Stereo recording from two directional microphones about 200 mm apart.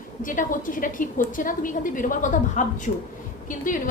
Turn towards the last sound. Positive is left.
turn(degrees=40)  # may be behind; listen again after turning